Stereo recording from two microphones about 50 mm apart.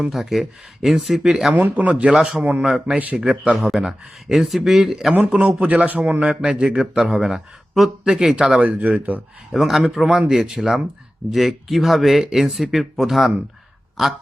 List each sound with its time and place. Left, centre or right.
0.0 s speech: centre
1.5 s speech: right
1.9 s a man's voice: right
2.1 s a man's voice: centre
2.4 s speech: right
2.6 s a man's voice: centre
2.9 s speech: right
3.8 s speech: centre
5.3 s a man's voice: right
6.4 s a man's voice: centre
8.5 s speech: right
9.5 s speech: centre